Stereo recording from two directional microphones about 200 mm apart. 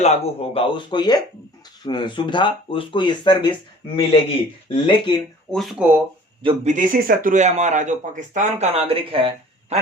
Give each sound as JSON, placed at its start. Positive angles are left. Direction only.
{"t": 0.0, "sound": "speech", "side_deg": 30}
{"t": 5.5, "sound": "speech", "side_deg": 0}
{"t": 6.4, "sound": "speech", "side_deg": -30}